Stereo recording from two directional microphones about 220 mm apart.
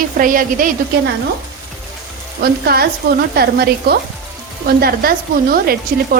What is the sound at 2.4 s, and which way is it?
Sizzle, 45° right (ahead or behind).